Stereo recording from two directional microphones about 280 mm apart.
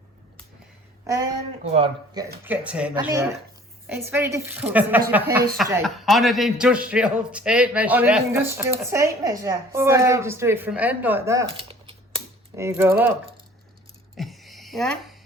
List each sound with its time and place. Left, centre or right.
1.0 s a man's voice: centre
2.4 s a man's voice: centre
14.2 s a sound: centre